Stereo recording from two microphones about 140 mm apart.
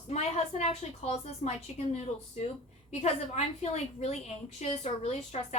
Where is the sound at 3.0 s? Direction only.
50° left (ahead or behind).